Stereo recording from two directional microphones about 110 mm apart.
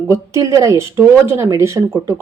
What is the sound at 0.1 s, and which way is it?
Speech, 30° right (ahead or behind).